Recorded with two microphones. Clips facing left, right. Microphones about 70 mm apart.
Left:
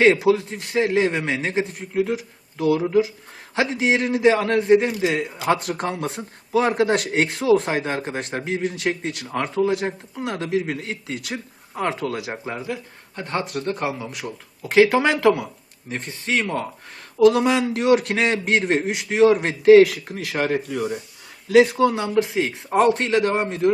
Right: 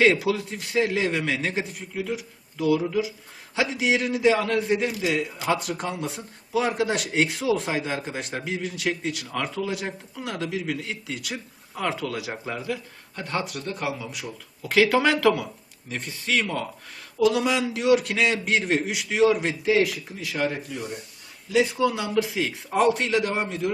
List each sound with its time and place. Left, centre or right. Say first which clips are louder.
0.0 s a man's voice: left 4 dB; left
2.0 s a man's voice: left 8 dB; left
13.2 s a man's voice: left 4 dB; left
14.1 s speech: left 4 dB; left
14.6 s a man's voice: left 4 dB; left
15.9 s a man's voice: left 2 dB; left
17.2 s a man's voice: left 6 dB; left
21.5 s a man's voice: left 7 dB; left
21.8 s a man's voice: left 4 dB; left